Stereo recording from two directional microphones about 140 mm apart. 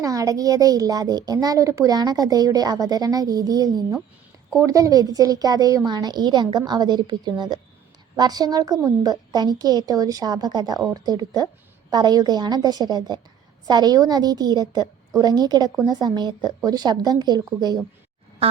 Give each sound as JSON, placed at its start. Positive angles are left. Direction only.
{"t": 0.0, "sound": "a woman's voice", "side_deg": -25}